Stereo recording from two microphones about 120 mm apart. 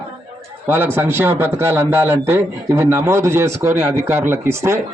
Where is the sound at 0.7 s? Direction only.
15° right (ahead or behind).